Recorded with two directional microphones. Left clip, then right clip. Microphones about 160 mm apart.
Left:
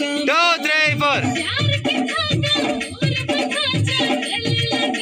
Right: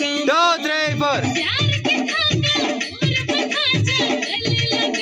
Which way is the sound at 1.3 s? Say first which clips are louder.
Right 1 dB; 50° left (ahead or behind).